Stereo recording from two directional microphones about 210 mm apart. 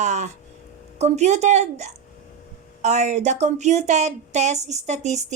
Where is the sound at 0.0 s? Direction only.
35° right (ahead or behind).